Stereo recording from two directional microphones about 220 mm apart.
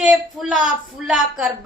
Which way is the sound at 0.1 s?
5° right (ahead or behind).